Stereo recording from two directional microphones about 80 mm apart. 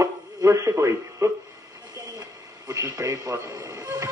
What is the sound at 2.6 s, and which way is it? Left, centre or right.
Speech, right.